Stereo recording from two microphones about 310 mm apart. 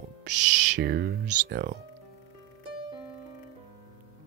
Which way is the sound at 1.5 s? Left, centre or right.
Right.